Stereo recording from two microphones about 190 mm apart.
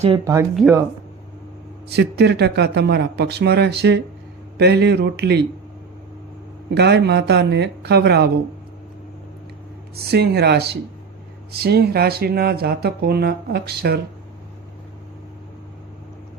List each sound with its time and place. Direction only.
0.5 s speech: centre (ahead or behind)
1.9 s speech: 60° right (ahead or behind)
6.7 s speech: 60° right (ahead or behind)
9.9 s speech: 55° right (ahead or behind)